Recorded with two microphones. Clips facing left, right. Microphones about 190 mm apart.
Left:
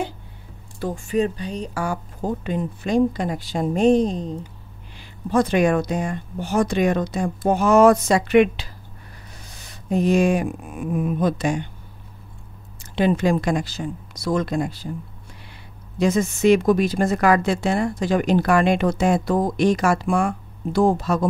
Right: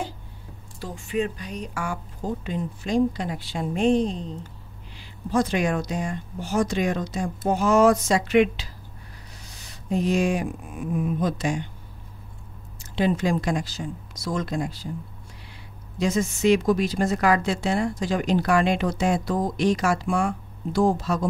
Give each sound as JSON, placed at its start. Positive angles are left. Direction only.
{"t": 0.7, "sound": "speech", "side_deg": 50}
{"t": 2.2, "sound": "speech", "side_deg": 55}
{"t": 4.9, "sound": "a woman's voice", "side_deg": 55}
{"t": 9.5, "sound": "a sound", "side_deg": 55}
{"t": 10.9, "sound": "a woman's voice", "side_deg": 60}
{"t": 12.9, "sound": "a woman's voice", "side_deg": 60}
{"t": 16.0, "sound": "a woman's voice", "side_deg": 55}